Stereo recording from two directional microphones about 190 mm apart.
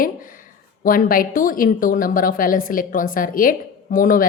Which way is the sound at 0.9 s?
50° left (ahead or behind).